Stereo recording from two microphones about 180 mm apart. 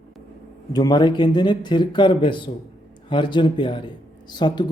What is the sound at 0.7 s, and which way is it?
Speech, 20° left (ahead or behind).